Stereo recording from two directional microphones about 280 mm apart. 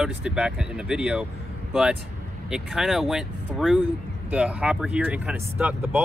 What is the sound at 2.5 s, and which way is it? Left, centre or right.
Speech, centre.